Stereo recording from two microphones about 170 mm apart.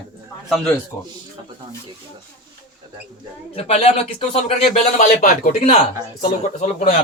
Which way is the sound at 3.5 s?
35° left (ahead or behind).